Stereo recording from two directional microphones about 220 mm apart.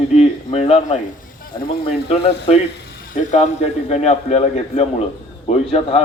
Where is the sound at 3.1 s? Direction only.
35° left (ahead or behind).